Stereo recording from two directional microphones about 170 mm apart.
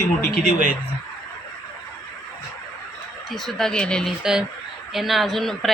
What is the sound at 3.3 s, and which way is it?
A woman's voice, centre (ahead or behind).